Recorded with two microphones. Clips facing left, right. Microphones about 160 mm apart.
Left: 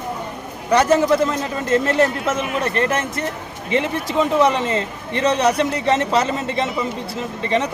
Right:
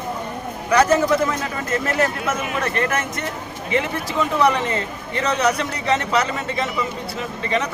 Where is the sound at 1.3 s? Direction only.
30° left (ahead or behind).